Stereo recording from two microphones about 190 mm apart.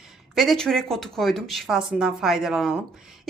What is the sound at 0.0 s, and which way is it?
Speech, centre (ahead or behind).